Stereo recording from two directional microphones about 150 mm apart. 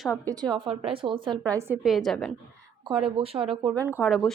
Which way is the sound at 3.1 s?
40° right (ahead or behind).